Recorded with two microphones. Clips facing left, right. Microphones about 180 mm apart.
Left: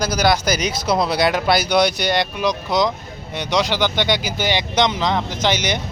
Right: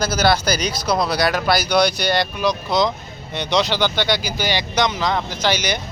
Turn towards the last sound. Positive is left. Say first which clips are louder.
# left 1 dB
turn(degrees=20)  # may be behind; listen again after turning